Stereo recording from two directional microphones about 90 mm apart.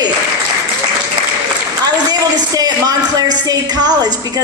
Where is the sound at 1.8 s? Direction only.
45° right (ahead or behind).